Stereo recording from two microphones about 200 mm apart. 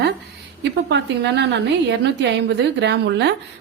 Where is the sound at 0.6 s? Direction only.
60° right (ahead or behind).